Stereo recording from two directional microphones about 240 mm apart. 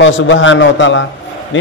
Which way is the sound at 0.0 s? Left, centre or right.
Left.